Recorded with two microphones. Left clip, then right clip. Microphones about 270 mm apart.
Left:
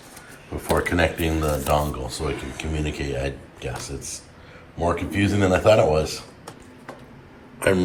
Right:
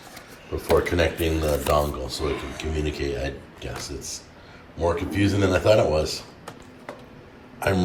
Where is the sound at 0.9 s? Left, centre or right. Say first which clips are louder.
Left 1 dB; centre.